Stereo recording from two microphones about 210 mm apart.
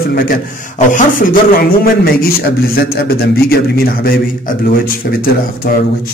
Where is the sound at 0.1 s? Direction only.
40° left (ahead or behind).